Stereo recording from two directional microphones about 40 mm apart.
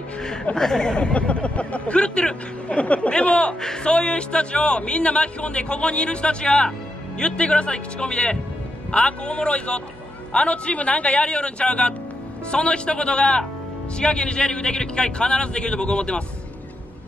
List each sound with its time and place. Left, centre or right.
0.6 s a man's voice: centre